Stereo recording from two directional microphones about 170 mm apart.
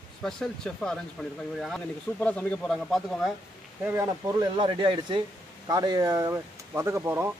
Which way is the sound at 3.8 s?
15° right (ahead or behind).